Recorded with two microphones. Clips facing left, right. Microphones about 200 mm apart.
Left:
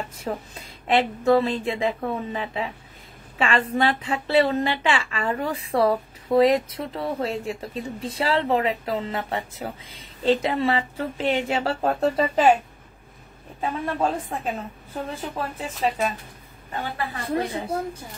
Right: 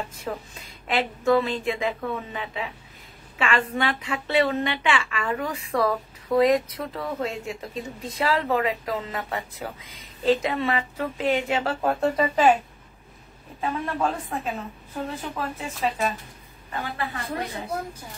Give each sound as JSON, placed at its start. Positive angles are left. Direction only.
{"t": 0.3, "sound": "speech", "side_deg": 30}
{"t": 13.6, "sound": "speech", "side_deg": 25}